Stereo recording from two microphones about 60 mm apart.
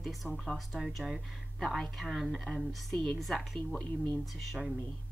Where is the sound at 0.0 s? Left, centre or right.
Centre.